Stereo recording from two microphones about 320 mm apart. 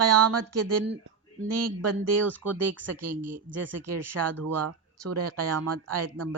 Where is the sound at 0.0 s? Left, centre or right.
Right.